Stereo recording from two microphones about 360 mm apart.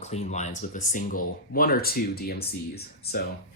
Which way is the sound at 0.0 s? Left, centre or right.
Centre.